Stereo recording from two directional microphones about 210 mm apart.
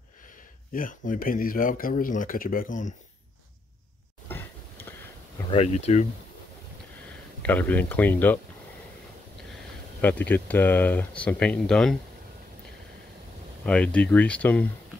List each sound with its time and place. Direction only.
0.7 s speech: 40° left (ahead or behind)
4.3 s a sound: 10° left (ahead or behind)
5.5 s speech: 30° left (ahead or behind)
7.4 s speech: 10° left (ahead or behind)
10.0 s speech: 10° left (ahead or behind)
13.7 s speech: 5° left (ahead or behind)